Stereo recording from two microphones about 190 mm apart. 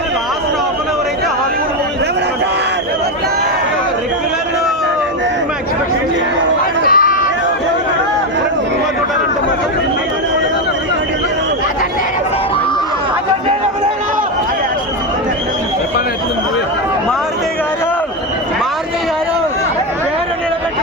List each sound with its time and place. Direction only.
6.8 s run: 50° left (ahead or behind)